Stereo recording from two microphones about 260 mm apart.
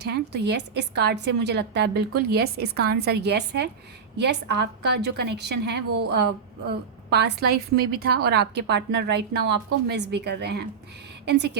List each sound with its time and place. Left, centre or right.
0.0 s a woman's voice: right